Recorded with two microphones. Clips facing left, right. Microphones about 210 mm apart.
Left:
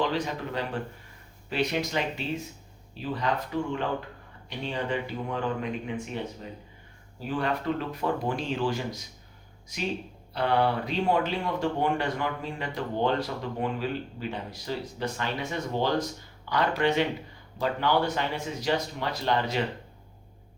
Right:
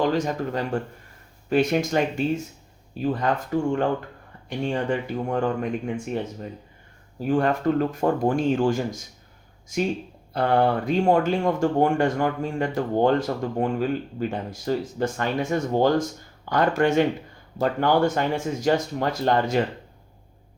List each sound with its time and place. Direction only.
0.0 s speech: 45° right (ahead or behind)
7.3 s speech: 45° right (ahead or behind)